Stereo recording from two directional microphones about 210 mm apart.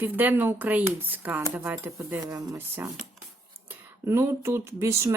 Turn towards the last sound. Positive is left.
turn(degrees=-15)  # may be behind; listen again after turning